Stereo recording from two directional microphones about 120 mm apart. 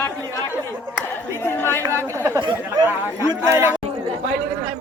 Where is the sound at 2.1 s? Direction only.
25° right (ahead or behind).